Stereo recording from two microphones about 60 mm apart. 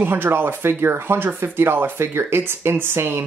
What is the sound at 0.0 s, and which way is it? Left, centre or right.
Speech, right.